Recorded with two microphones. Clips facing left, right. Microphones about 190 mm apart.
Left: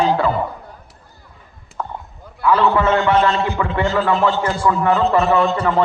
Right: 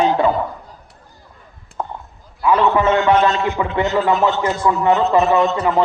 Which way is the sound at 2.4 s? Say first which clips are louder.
Right 1 dB; 15° right (ahead or behind).